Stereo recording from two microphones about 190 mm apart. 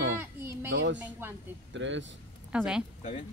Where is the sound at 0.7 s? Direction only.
65° right (ahead or behind).